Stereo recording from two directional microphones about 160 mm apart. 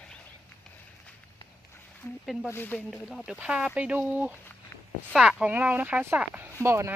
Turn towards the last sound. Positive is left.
turn(degrees=-15)  # may be behind; listen again after turning